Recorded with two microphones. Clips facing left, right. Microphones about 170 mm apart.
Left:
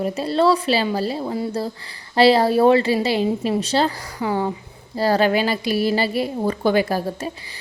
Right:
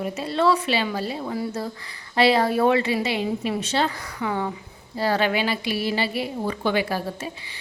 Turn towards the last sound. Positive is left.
turn(degrees=40)  # may be behind; listen again after turning